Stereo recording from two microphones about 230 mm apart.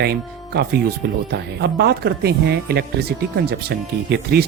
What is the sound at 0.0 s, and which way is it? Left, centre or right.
Speech, right.